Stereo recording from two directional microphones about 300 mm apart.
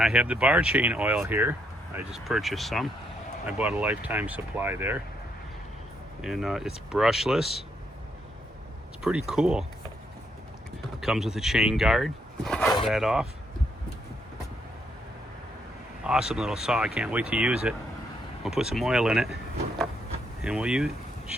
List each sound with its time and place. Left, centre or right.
0.0 s speech: centre
6.2 s speech: centre
9.0 s speech: centre
11.0 s speech: centre
16.0 s speech: centre
20.4 s speech: centre